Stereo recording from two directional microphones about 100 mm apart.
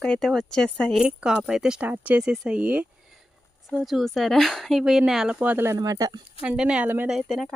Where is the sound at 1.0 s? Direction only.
10° right (ahead or behind).